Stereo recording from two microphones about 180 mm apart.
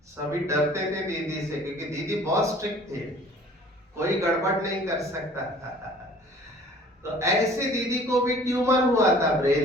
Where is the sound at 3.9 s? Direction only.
15° right (ahead or behind).